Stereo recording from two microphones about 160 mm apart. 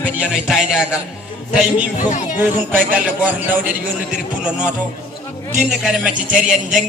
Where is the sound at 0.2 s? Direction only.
5° right (ahead or behind).